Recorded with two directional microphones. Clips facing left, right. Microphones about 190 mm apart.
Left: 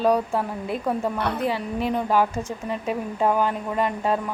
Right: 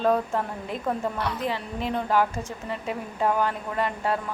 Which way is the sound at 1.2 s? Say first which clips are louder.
Left 4 dB; 60° left (ahead or behind).